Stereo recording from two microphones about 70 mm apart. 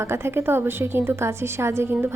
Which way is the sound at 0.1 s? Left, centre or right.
Right.